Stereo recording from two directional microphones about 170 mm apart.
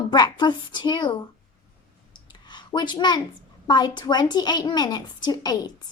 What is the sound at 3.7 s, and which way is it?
A woman's voice, 25° left (ahead or behind).